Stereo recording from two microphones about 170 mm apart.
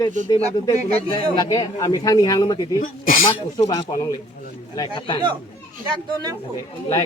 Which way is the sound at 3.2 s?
25° left (ahead or behind).